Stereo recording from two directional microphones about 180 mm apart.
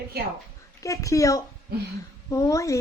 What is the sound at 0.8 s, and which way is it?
Speech, 15° left (ahead or behind).